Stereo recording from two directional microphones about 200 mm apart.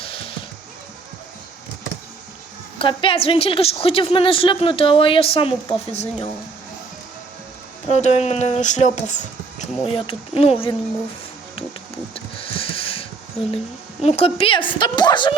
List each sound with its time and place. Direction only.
0.0 s music: 30° left (ahead or behind)
2.7 s a woman's voice: 25° left (ahead or behind)
7.9 s a woman's voice: 35° left (ahead or behind)
12.1 s a sound: 25° left (ahead or behind)
14.0 s a woman's voice: 30° left (ahead or behind)